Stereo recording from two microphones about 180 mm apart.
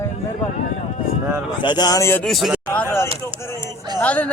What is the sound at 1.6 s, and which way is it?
Speech, 25° left (ahead or behind).